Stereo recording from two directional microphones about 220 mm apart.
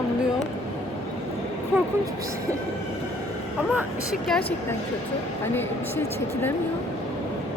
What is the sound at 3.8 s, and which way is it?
Speech, centre (ahead or behind).